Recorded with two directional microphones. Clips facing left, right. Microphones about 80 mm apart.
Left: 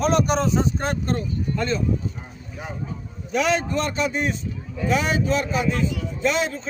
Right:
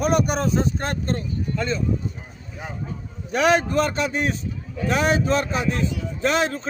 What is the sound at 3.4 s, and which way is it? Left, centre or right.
Speech, right.